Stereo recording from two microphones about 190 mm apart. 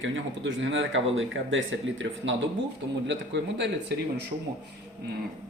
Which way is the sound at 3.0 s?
70° right (ahead or behind).